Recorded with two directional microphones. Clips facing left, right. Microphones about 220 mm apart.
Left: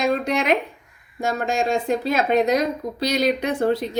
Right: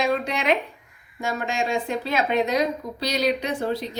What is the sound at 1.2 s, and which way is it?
A woman's voice, 40° left (ahead or behind).